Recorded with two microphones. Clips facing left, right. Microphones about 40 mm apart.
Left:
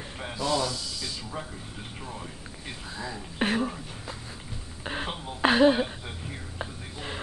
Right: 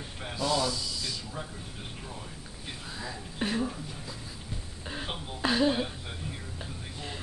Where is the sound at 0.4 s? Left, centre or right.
Left.